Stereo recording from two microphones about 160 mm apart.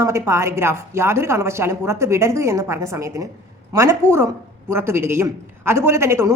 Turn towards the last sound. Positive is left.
turn(degrees=-15)  # may be behind; listen again after turning